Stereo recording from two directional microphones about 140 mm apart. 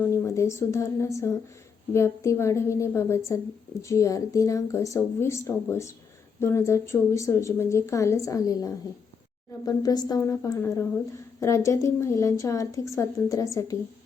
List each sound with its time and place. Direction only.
0.0 s a woman's voice: 20° left (ahead or behind)